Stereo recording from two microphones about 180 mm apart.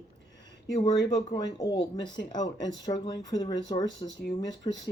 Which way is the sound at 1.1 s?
20° left (ahead or behind).